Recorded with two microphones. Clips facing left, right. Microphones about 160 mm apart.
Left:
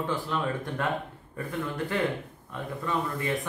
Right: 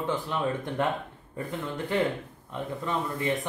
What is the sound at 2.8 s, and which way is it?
Speech, 20° right (ahead or behind).